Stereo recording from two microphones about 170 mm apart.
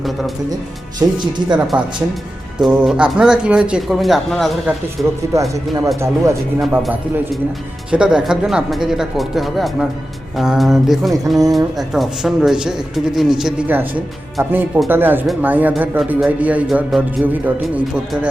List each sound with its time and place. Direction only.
0.9 s speech: 25° right (ahead or behind)
1.5 s speech: 5° right (ahead or behind)
5.3 s speech: 20° right (ahead or behind)
6.6 s speech: centre (ahead or behind)